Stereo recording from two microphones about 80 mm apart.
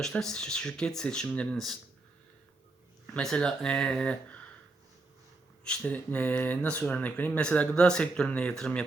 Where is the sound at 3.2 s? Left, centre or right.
Centre.